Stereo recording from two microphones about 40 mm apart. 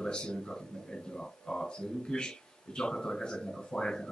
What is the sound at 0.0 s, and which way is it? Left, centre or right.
Speech, left.